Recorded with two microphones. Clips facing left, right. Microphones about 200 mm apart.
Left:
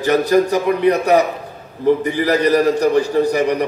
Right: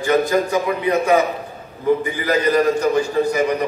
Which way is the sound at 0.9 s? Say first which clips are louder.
Left 2 dB; 40° left (ahead or behind).